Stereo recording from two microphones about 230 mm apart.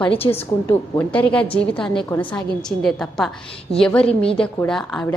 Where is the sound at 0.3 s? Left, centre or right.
Centre.